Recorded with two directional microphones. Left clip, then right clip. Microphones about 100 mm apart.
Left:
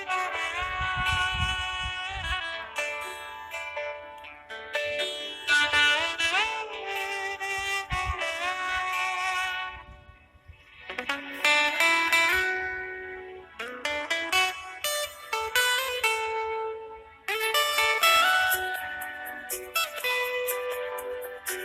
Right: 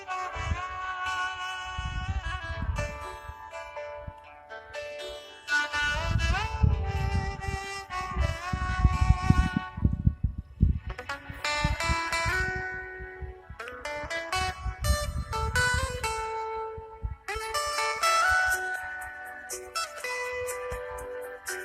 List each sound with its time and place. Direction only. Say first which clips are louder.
0.1 s music: left 5 dB; 20° left (ahead or behind)
10.9 s music: left 6 dB; 20° left (ahead or behind)